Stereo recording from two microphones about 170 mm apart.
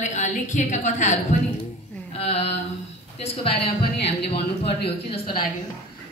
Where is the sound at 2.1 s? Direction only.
35° left (ahead or behind).